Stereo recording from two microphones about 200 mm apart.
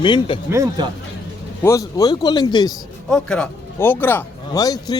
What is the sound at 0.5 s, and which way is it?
Speech, 15° right (ahead or behind).